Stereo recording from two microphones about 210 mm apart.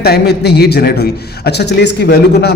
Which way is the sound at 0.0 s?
50° left (ahead or behind).